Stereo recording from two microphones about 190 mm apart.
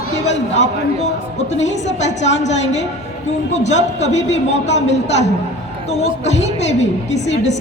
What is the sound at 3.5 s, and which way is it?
A woman's voice, 35° left (ahead or behind).